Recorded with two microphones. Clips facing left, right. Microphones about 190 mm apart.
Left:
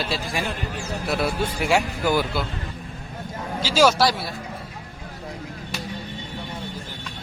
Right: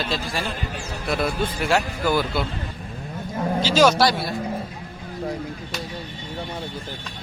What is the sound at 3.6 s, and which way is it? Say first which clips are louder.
Speech: right 1 dB; 5° left (ahead or behind).